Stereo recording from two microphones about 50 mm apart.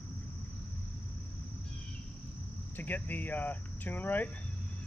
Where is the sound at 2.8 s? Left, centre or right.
Left.